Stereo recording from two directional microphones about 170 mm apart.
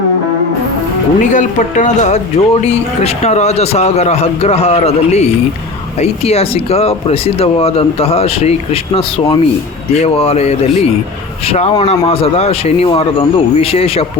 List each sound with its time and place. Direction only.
1.2 s speech: 45° left (ahead or behind)